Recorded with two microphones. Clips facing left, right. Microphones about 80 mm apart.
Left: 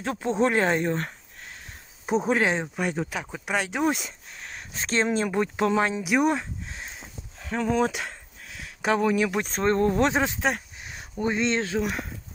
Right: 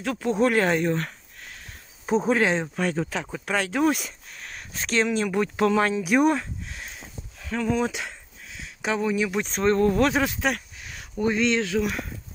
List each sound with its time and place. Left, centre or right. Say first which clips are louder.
0.0 s speech: right 1 dB; left
2.0 s speech: right 2 dB; centre
6.7 s speech: even; left